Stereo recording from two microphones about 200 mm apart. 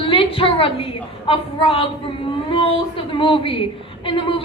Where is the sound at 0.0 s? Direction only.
25° left (ahead or behind).